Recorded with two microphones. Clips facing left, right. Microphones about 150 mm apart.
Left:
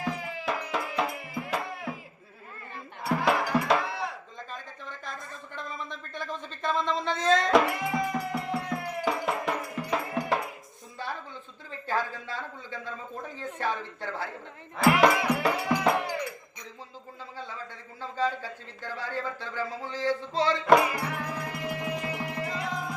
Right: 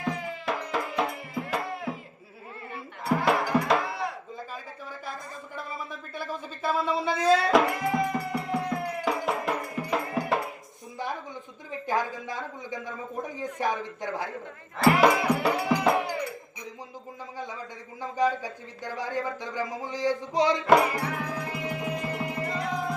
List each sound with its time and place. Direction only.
0.0 s music: centre (ahead or behind)
3.0 s sheep: centre (ahead or behind)
4.5 s a sound: 10° right (ahead or behind)
10.9 s a sound: 15° right (ahead or behind)
11.7 s a man's voice: 15° right (ahead or behind)
14.8 s speech: centre (ahead or behind)
17.3 s speech: 15° right (ahead or behind)
20.9 s music: 10° left (ahead or behind)
21.8 s music: 10° right (ahead or behind)
22.0 s music: 5° left (ahead or behind)